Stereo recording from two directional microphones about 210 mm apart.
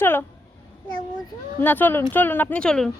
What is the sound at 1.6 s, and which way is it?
A woman's voice, 10° left (ahead or behind).